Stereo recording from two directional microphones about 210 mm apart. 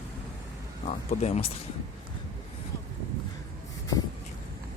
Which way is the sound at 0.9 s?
30° left (ahead or behind).